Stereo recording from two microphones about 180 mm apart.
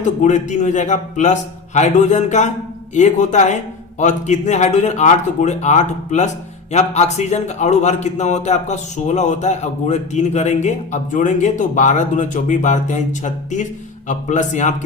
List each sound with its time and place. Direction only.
0.0 s a man's voice: 40° left (ahead or behind)